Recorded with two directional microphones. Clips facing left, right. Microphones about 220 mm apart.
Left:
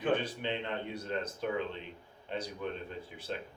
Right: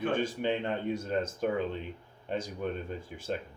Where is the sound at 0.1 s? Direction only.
45° right (ahead or behind).